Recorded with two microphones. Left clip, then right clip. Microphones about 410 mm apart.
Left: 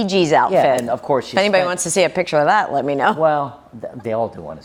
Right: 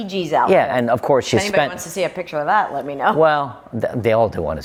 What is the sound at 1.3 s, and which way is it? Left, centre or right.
A woman's voice, left.